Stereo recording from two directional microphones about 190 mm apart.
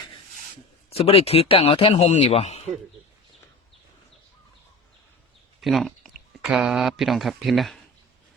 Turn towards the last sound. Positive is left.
turn(degrees=0)  # may be behind; listen again after turning